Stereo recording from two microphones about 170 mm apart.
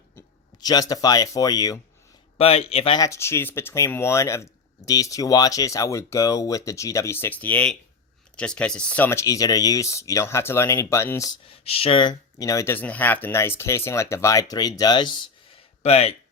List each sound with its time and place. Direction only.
0.2 s speech: 25° left (ahead or behind)
2.4 s speech: 35° left (ahead or behind)
3.0 s speech: 15° left (ahead or behind)
11.4 s speech: 35° left (ahead or behind)
15.8 s speech: 40° left (ahead or behind)